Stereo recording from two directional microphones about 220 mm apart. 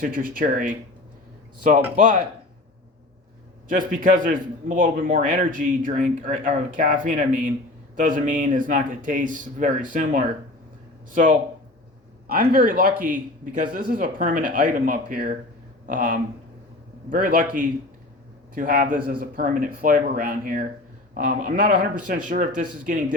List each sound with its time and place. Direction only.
0.0 s a man's voice: 40° right (ahead or behind)
3.7 s a man's voice: 40° right (ahead or behind)